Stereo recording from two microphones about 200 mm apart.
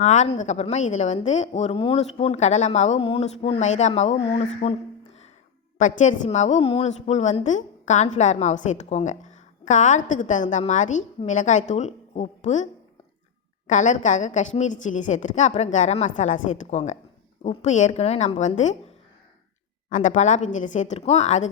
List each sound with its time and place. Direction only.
0.0 s a woman's voice: 35° left (ahead or behind)
5.8 s a woman's voice: 35° left (ahead or behind)
13.7 s a woman's voice: 40° left (ahead or behind)
19.9 s a woman's voice: 40° left (ahead or behind)